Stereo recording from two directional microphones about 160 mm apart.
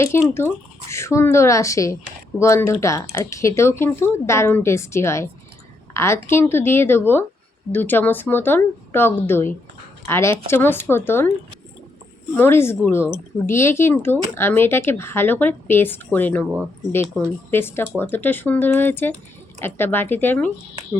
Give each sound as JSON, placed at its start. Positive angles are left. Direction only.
{"t": 0.0, "sound": "speech", "side_deg": 15}
{"t": 12.3, "sound": "speech", "side_deg": 15}